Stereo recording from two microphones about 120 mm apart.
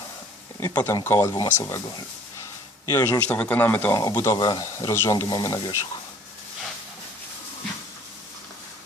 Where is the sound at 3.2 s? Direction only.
10° left (ahead or behind); by 5.7 s 30° left (ahead or behind).